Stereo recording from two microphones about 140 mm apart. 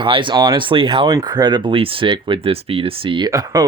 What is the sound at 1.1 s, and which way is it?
Speech, 25° right (ahead or behind).